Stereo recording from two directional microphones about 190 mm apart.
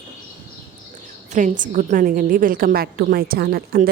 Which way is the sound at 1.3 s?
40° right (ahead or behind).